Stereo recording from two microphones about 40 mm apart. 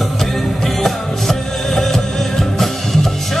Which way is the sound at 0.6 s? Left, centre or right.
Centre.